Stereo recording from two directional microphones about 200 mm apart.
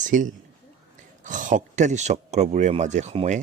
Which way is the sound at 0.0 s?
40° right (ahead or behind).